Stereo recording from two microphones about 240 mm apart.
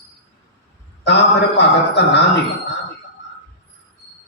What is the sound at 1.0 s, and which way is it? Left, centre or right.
A man's voice, left.